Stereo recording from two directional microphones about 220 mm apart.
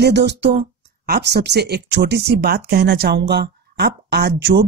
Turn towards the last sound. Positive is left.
turn(degrees=-50)  # may be behind; listen again after turning